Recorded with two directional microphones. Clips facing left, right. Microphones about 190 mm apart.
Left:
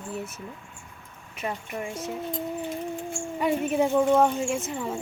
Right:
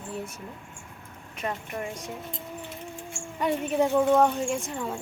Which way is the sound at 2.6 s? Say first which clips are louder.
Left 8 dB; 55° left (ahead or behind).